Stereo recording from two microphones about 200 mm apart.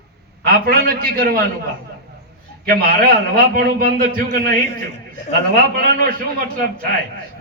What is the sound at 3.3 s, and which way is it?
A man's voice, 45° right (ahead or behind).